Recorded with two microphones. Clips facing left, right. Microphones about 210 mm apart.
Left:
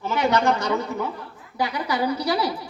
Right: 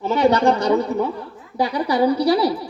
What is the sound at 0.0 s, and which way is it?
A woman's voice, 35° right (ahead or behind).